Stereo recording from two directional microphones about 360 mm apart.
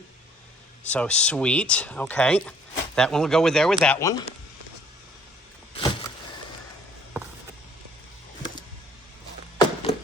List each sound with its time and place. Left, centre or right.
0.9 s speech: centre
5.7 s power windows: centre
9.9 s clip-clop: centre